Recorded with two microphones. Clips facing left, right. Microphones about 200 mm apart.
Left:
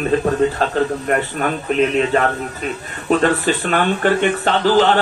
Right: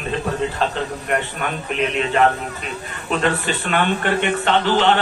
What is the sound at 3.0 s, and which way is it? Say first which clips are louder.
Speech: left 5 dB; 40° left (ahead or behind).